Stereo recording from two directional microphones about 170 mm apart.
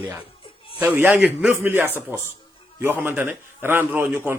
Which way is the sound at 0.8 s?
10° right (ahead or behind).